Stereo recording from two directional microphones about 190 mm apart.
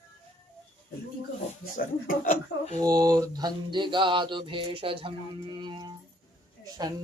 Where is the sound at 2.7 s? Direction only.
20° right (ahead or behind).